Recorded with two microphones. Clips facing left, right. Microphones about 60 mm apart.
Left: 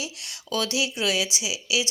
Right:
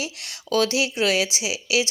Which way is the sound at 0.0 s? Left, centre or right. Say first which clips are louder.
Right 3 dB; right.